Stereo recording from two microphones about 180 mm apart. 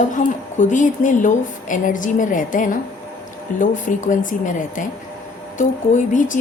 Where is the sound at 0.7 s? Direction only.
45° left (ahead or behind).